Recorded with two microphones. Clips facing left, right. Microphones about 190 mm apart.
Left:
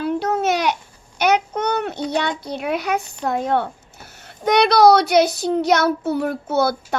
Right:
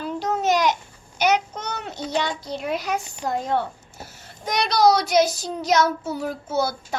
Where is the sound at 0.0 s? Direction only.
60° left (ahead or behind).